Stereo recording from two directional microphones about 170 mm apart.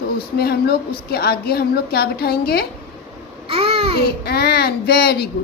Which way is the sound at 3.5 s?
35° right (ahead or behind).